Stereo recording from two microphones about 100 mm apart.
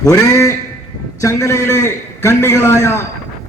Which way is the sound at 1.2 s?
30° left (ahead or behind).